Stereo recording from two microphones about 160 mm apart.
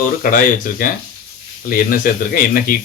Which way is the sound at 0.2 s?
60° left (ahead or behind).